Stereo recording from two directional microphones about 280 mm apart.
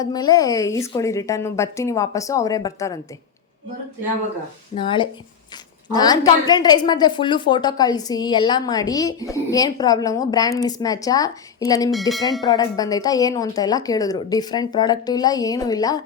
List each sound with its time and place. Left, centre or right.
0.0 s a woman's voice: centre
4.7 s a woman's voice: centre
11.9 s speech: centre
12.5 s a woman's voice: centre